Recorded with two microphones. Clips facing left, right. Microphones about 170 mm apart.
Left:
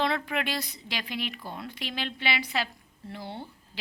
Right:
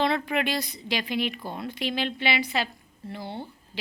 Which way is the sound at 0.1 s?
Centre (ahead or behind).